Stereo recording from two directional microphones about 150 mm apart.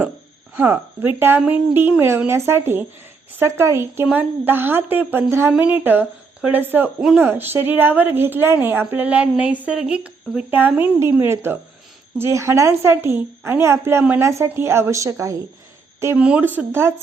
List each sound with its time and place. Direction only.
0.5 s a woman's voice: 15° right (ahead or behind)